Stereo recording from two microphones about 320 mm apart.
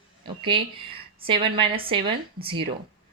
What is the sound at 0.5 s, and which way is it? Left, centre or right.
A woman's voice, centre.